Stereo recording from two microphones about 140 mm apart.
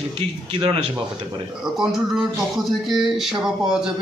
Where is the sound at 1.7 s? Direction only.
5° right (ahead or behind).